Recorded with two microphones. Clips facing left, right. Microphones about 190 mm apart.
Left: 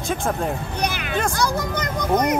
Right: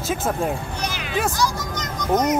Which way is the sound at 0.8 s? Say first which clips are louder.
Left 3 dB; 55° left (ahead or behind).